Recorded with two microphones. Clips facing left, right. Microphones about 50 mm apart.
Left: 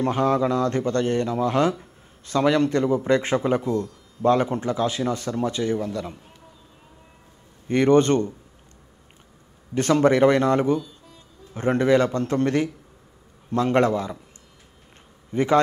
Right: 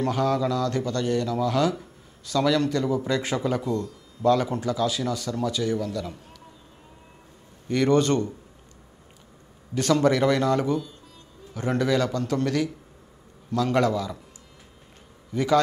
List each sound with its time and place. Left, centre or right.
0.0 s speech: left
7.6 s speech: left
9.8 s speech: left
15.3 s speech: left